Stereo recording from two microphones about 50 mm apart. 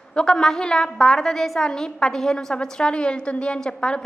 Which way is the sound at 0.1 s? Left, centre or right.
Centre.